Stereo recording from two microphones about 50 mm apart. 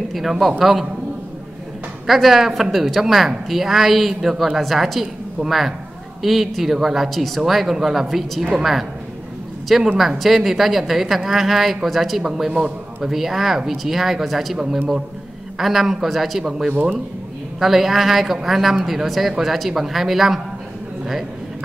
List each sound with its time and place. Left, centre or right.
0.1 s a woman's voice: centre
2.0 s a woman's voice: centre
9.9 s a woman's voice: centre
13.0 s a woman's voice: centre